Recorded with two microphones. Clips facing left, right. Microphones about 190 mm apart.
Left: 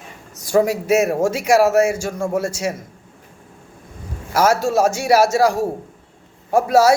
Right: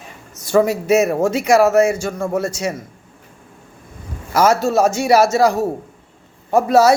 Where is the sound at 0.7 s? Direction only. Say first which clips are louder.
Right 2 dB; 10° left (ahead or behind).